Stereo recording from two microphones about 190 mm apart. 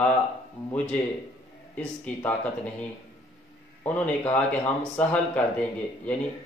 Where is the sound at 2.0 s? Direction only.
5° left (ahead or behind).